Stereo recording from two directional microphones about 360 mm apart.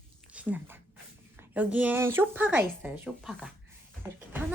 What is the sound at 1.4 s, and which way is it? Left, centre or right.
A woman's voice, centre.